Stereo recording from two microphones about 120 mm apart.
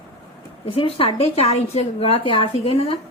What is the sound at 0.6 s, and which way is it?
A woman's voice, 50° left (ahead or behind).